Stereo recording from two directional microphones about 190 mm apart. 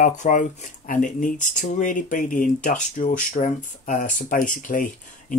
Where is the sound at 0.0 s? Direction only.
40° left (ahead or behind).